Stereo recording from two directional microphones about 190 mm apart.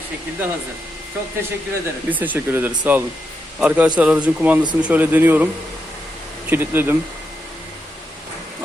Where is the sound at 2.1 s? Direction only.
10° right (ahead or behind).